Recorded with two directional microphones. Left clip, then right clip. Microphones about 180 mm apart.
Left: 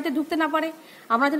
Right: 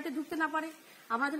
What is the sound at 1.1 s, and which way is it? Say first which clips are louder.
Speech: left 11 dB; 30° left (ahead or behind).